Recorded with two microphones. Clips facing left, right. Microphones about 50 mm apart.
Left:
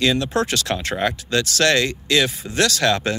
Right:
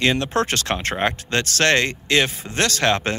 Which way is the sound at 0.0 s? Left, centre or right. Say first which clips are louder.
Even; right.